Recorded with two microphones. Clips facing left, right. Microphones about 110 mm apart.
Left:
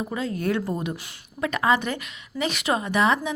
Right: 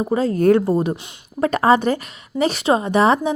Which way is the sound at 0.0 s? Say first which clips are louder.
Right 10 dB; 40° right (ahead or behind).